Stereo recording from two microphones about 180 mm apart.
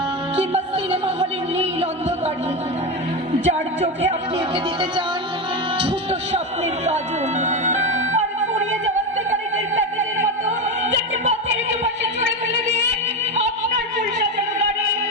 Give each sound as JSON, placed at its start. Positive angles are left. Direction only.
{"t": 0.3, "sound": "music", "side_deg": -35}
{"t": 3.4, "sound": "a woman's voice", "side_deg": -35}
{"t": 4.5, "sound": "music", "side_deg": -30}
{"t": 5.8, "sound": "speech", "side_deg": -35}
{"t": 6.8, "sound": "music", "side_deg": -40}